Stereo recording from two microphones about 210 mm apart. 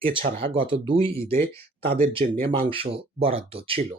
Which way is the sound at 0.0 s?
25° right (ahead or behind).